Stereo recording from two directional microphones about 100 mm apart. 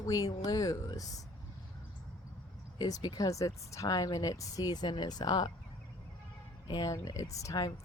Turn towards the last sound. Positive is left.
turn(degrees=35)  # may be behind; listen again after turning